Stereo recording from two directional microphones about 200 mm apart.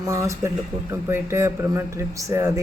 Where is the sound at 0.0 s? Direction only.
15° right (ahead or behind).